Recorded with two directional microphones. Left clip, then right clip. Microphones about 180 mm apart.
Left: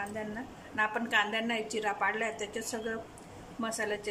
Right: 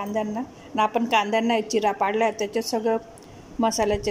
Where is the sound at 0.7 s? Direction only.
30° right (ahead or behind).